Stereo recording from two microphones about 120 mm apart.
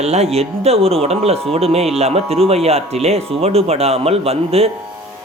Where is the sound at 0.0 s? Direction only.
65° right (ahead or behind).